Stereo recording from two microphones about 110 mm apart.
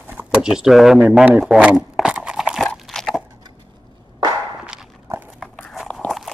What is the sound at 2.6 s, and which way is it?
Crunch, 5° left (ahead or behind).